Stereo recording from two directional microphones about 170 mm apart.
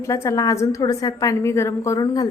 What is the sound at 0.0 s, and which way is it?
A woman's voice, 15° left (ahead or behind).